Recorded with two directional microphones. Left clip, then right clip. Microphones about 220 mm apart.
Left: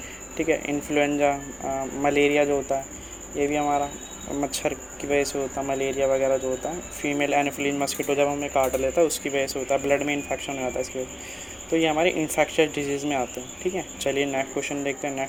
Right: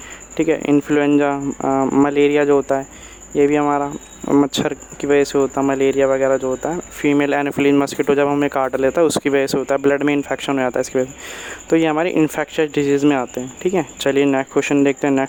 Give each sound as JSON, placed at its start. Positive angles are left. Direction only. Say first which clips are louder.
{"t": 0.6, "sound": "speech", "louder": "right 8 dB", "side_deg": -35}